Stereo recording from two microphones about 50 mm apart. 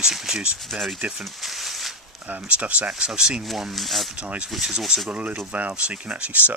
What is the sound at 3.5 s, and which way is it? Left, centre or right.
Speech, centre.